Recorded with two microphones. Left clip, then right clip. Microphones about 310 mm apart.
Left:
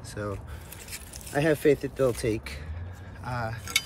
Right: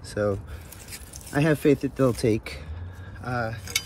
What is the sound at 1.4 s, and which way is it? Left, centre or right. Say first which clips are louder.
Speech: right 1 dB; centre.